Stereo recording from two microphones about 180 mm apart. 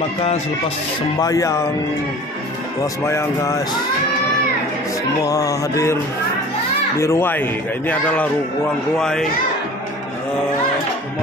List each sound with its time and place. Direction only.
1.2 s speech: 20° left (ahead or behind)
3.1 s speech: 15° left (ahead or behind)
5.2 s speech: 20° left (ahead or behind)
7.0 s speech: 15° left (ahead or behind)